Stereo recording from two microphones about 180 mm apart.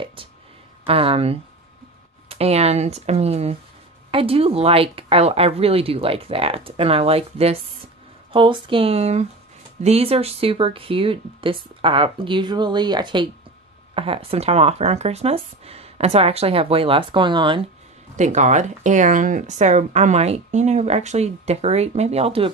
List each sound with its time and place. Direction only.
0.0 s a sound: 30° right (ahead or behind)
0.8 s speech: 30° right (ahead or behind)
18.1 s speech: 40° right (ahead or behind)